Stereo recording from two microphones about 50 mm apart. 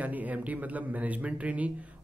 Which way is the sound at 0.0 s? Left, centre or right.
Right.